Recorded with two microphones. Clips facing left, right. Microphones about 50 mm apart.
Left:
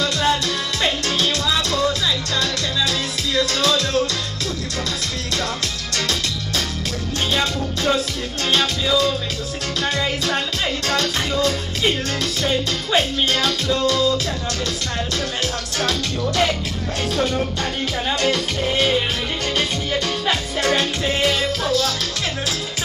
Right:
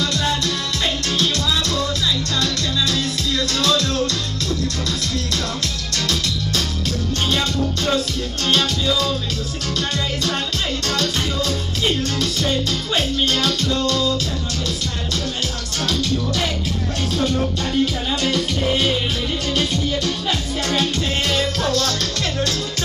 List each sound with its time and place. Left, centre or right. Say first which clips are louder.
0.0 s music: left 2 dB; centre
5.9 s music: even; centre
7.3 s music: right 1 dB; centre
10.9 s music: left 1 dB; centre
20.2 s music: left 3 dB; left
21.2 s music: left 1 dB; centre